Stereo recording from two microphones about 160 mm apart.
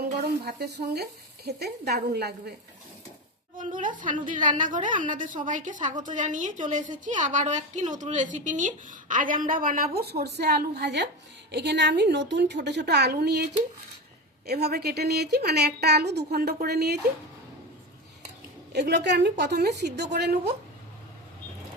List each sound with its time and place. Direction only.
0.2 s a woman's voice: 90° right
3.6 s a woman's voice: 55° right (ahead or behind); by 17.0 s 85° right
18.7 s a woman's voice: 90° right